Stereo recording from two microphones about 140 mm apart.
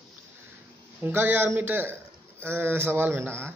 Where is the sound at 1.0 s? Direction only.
15° right (ahead or behind).